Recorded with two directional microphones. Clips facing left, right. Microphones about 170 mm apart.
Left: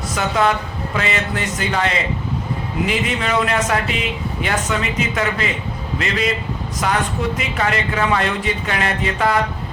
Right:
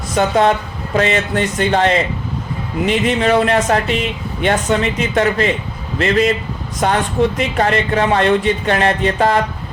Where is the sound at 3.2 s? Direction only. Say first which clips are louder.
Right 7 dB; 35° right (ahead or behind).